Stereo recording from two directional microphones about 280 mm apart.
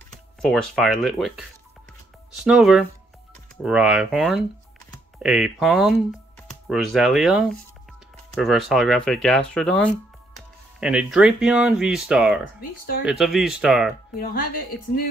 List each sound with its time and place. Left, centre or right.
0.4 s speech: centre
12.5 s speech: left
13.0 s speech: centre